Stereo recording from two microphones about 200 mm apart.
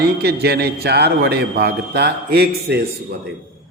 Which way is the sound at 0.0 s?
55° right (ahead or behind).